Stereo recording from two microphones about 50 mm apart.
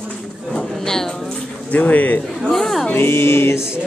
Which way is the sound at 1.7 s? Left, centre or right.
Left.